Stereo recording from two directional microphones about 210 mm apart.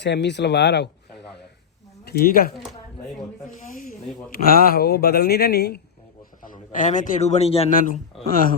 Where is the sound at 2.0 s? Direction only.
45° left (ahead or behind).